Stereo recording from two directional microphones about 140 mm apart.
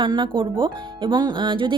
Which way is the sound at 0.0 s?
35° right (ahead or behind).